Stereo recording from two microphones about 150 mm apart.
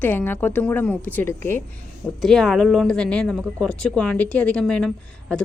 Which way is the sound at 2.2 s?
Centre (ahead or behind).